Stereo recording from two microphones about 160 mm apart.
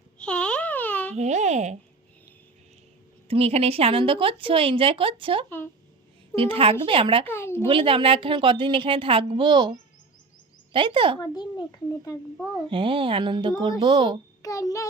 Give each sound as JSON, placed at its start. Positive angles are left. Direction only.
{"t": 0.2, "sound": "a sound", "side_deg": 5}
{"t": 1.1, "sound": "a child's voice", "side_deg": -45}
{"t": 3.2, "sound": "speech", "side_deg": -40}
{"t": 7.3, "sound": "speech", "side_deg": 15}
{"t": 7.7, "sound": "speech", "side_deg": -35}
{"t": 11.2, "sound": "a child's voice", "side_deg": 25}
{"t": 12.7, "sound": "speech", "side_deg": -35}
{"t": 14.4, "sound": "a child's voice", "side_deg": 20}